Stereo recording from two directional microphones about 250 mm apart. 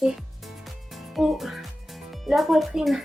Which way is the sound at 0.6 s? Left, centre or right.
Centre.